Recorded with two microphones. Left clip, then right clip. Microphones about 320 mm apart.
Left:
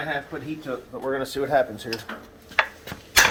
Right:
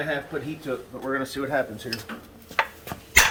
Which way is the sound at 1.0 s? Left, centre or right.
Left.